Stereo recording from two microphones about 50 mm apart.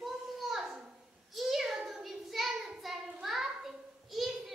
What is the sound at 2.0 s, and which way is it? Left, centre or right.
Child singing, centre.